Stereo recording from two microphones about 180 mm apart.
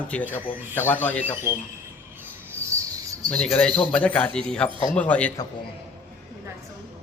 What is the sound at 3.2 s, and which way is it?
A man's voice, 5° left (ahead or behind).